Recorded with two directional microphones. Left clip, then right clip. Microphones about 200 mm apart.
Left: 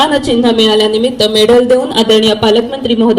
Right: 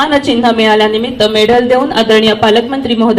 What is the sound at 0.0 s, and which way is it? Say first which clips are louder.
A woman's voice: even; 20° right (ahead or behind).